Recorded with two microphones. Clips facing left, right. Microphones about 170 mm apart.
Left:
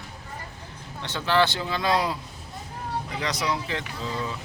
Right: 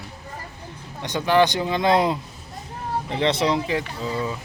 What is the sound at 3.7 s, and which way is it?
Speech, 10° right (ahead or behind).